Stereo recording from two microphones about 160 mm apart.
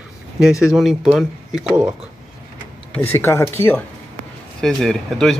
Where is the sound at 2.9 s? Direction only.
15° left (ahead or behind).